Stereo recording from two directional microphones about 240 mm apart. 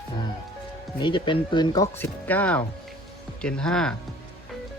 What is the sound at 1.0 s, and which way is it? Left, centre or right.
Speech, centre.